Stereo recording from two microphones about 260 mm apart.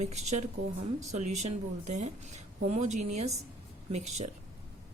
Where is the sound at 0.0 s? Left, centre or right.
Right.